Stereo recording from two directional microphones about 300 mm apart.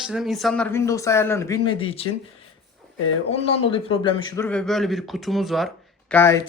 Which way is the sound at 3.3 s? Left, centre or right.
Centre.